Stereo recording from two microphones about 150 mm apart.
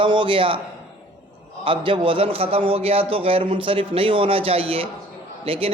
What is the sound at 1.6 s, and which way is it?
A man's voice, 35° right (ahead or behind).